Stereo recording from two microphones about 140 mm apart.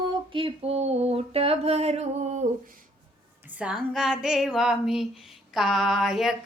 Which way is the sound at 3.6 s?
5° right (ahead or behind).